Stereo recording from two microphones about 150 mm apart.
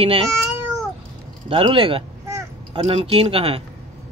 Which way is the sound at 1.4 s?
35° right (ahead or behind).